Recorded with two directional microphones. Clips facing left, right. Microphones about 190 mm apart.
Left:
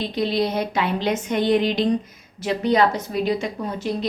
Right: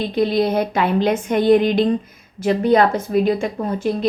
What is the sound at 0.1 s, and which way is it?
A woman's voice, 55° right (ahead or behind).